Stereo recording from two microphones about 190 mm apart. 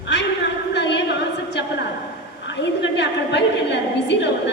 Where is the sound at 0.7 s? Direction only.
65° left (ahead or behind).